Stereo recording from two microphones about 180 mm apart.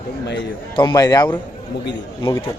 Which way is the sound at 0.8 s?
20° left (ahead or behind).